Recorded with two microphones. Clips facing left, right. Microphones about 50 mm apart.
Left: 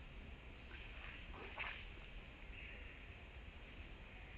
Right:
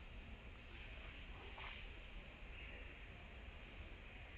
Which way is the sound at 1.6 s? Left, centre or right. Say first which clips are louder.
Left 7 dB; left.